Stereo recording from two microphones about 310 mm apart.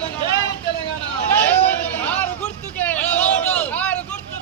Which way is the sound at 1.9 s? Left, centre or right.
Centre.